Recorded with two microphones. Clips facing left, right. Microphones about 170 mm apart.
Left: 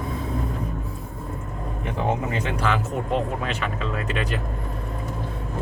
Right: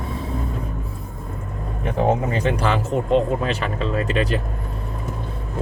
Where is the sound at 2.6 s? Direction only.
35° right (ahead or behind).